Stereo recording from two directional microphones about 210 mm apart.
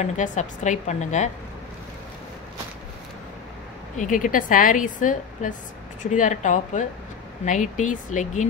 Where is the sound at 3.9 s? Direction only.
35° left (ahead or behind).